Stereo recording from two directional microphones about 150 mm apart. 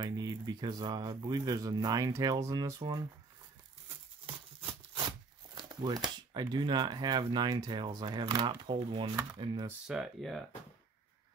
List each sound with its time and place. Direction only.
0.0 s speech: 25° right (ahead or behind)
5.5 s speech: 30° right (ahead or behind)
9.7 s speech: 5° right (ahead or behind)